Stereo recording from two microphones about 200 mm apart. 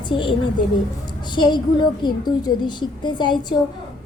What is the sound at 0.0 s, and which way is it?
A woman's voice, 25° left (ahead or behind).